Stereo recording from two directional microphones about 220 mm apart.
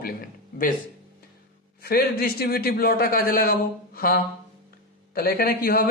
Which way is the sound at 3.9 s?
40° left (ahead or behind).